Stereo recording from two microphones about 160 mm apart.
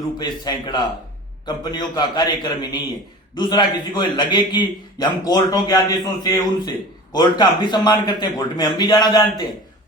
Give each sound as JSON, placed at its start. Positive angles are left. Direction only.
{"t": 0.2, "sound": "a man's voice", "side_deg": 25}